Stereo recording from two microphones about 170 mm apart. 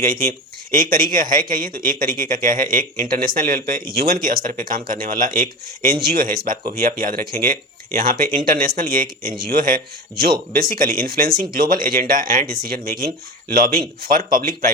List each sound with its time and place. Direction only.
0.0 s speech: 55° right (ahead or behind)